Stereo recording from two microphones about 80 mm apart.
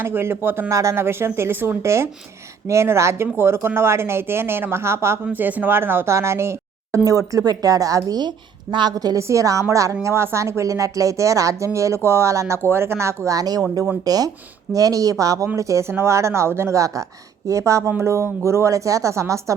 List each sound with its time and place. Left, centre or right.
0.0 s speech: right
0.7 s speech: right
8.7 s a woman's voice: right
9.0 s speech: right